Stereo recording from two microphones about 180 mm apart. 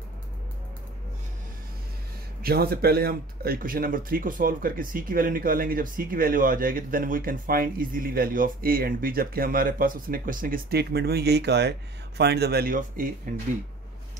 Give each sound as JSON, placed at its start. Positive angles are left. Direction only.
{"t": 2.4, "sound": "speech", "side_deg": -60}